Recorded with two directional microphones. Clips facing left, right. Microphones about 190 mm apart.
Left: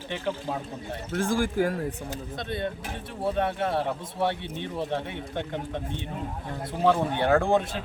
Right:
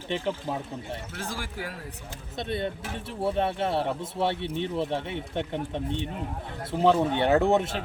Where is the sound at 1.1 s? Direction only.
50° left (ahead or behind).